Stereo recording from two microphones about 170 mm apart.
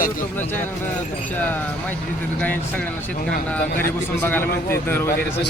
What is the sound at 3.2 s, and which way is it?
Livestock, 60° left (ahead or behind).